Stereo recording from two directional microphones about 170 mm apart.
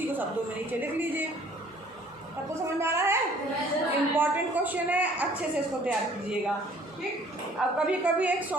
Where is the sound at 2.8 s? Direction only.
15° right (ahead or behind).